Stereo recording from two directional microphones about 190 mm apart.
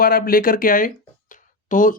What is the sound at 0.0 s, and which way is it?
Speech, 50° left (ahead or behind).